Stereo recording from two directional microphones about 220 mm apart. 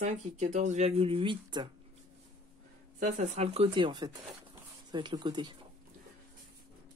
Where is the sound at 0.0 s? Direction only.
30° right (ahead or behind).